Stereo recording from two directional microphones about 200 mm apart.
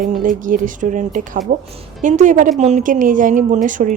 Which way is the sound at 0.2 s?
40° right (ahead or behind).